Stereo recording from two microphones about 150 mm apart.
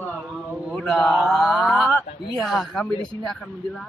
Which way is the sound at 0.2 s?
Centre (ahead or behind).